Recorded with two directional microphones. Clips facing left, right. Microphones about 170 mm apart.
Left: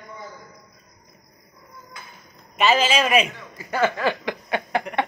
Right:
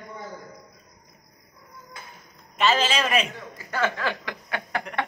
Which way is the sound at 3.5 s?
15° left (ahead or behind).